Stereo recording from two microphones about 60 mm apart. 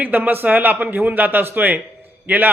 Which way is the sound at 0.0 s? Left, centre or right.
Right.